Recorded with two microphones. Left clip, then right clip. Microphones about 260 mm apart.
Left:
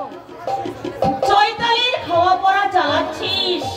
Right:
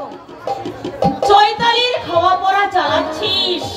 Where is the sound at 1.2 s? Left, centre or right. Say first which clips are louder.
Right 5 dB; right.